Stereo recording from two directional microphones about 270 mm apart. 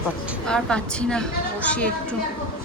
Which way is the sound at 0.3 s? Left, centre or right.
Centre.